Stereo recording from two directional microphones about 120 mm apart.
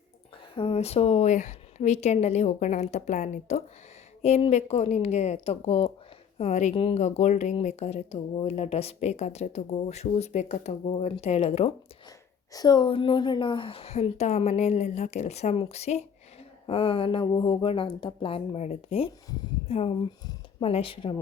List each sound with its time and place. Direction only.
0.5 s a woman's voice: 55° left (ahead or behind); by 3.6 s 90° left
4.2 s speech: 60° left (ahead or behind)
6.4 s a woman's voice: 70° left (ahead or behind)
6.7 s a woman's voice: 60° left (ahead or behind)
11.1 s speech: 55° left (ahead or behind)
12.5 s speech: 35° left (ahead or behind)
20.7 s speech: 50° left (ahead or behind)